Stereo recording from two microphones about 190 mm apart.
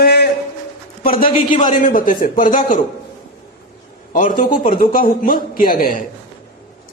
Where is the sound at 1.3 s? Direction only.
30° left (ahead or behind).